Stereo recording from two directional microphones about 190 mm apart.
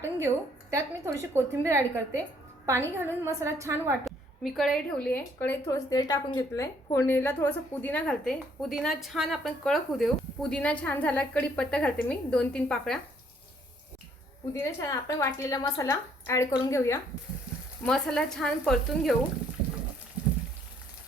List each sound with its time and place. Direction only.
0.2 s a woman's voice: 15° right (ahead or behind)
4.0 s a woman's voice: centre (ahead or behind)
14.6 s a woman's voice: 15° left (ahead or behind)
17.8 s speech: 5° left (ahead or behind)